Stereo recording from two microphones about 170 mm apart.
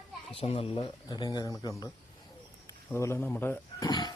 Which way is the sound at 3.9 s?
25° left (ahead or behind).